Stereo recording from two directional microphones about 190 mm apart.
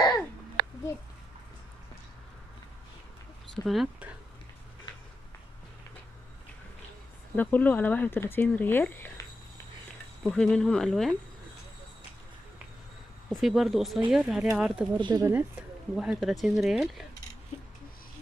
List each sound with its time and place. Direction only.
3.5 s speech: centre (ahead or behind)
7.3 s speech: 10° left (ahead or behind)
10.2 s speech: 5° left (ahead or behind)
13.3 s speech: centre (ahead or behind)
15.0 s speech: 25° right (ahead or behind)
15.9 s speech: 5° right (ahead or behind)